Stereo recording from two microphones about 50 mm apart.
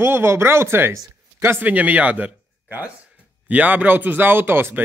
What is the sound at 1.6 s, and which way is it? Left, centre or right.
Speech, right.